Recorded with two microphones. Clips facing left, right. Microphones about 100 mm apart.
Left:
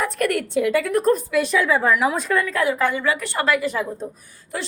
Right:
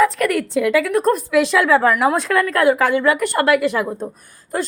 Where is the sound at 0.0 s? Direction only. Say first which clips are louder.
Right 5 dB; 90° right; by 3.8 s 70° right (ahead or behind).